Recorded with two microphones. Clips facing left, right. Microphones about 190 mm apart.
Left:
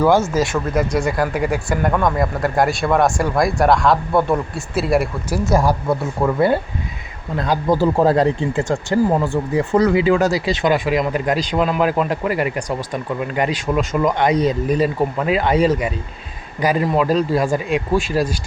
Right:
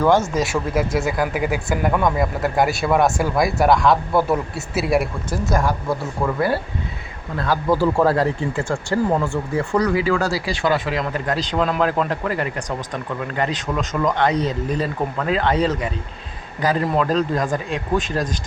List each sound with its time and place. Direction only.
0.0 s speech: 10° left (ahead or behind)
0.4 s speech: 5° right (ahead or behind)
5.5 s speech: 30° left (ahead or behind)
7.3 s speech: 15° left (ahead or behind)